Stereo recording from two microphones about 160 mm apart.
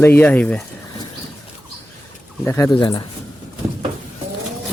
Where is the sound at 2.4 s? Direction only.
15° left (ahead or behind).